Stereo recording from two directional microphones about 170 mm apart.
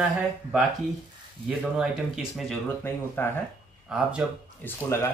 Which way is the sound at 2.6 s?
15° left (ahead or behind).